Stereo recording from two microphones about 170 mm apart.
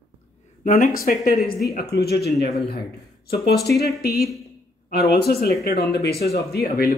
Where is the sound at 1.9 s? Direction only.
70° left (ahead or behind).